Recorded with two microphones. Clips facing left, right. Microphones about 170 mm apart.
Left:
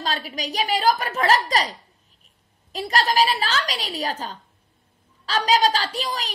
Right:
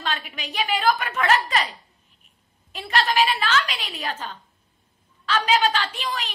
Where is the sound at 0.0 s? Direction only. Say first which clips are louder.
Left 3 dB; 35° left (ahead or behind).